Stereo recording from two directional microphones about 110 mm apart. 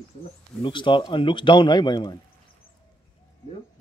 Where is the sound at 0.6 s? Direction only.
45° left (ahead or behind).